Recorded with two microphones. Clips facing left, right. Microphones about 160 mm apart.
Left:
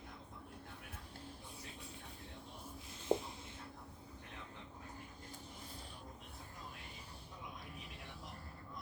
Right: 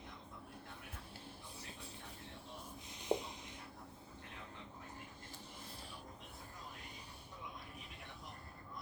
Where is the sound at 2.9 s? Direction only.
15° right (ahead or behind).